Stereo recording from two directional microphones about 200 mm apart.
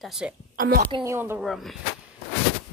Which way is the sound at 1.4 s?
Centre (ahead or behind).